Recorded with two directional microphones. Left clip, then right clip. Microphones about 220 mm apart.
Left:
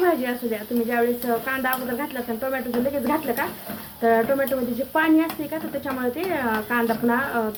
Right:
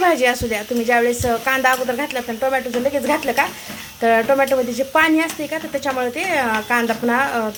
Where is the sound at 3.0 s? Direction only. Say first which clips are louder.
Right 6 dB; 40° right (ahead or behind).